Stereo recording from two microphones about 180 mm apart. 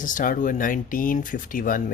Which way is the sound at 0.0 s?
45° left (ahead or behind).